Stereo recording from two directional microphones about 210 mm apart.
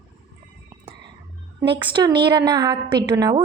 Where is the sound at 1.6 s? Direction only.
25° right (ahead or behind).